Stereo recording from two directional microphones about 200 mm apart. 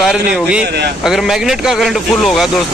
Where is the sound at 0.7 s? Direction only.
55° right (ahead or behind).